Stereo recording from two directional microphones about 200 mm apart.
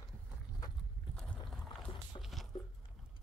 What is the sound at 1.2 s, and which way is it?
Boat, 5° left (ahead or behind).